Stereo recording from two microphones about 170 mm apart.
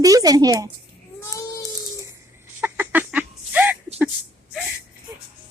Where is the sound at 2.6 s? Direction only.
10° right (ahead or behind).